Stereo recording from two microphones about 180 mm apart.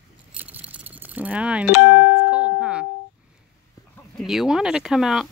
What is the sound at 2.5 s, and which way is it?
Music, 5° right (ahead or behind).